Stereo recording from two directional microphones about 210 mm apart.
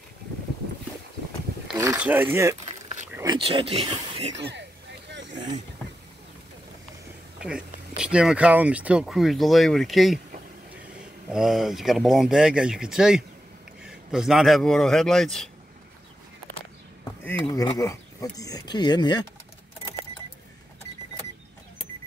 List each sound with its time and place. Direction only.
1.8 s speech: 10° right (ahead or behind)
3.2 s speech: 20° right (ahead or behind)
4.4 s speech: 55° right (ahead or behind)
7.3 s speech: 5° right (ahead or behind)
17.5 s speech: 20° left (ahead or behind)